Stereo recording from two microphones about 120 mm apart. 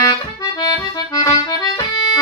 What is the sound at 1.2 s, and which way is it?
Accordion, 35° left (ahead or behind).